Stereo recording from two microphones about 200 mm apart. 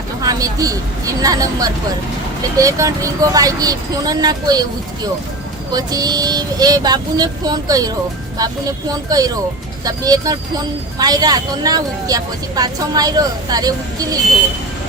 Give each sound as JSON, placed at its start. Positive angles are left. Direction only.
{"t": 0.2, "sound": "speech", "side_deg": -15}
{"t": 5.7, "sound": "speech", "side_deg": -20}